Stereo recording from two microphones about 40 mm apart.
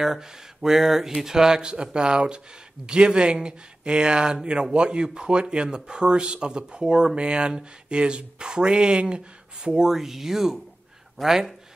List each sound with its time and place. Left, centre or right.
0.0 s speech: centre
9.9 s speech: centre
11.2 s speech: centre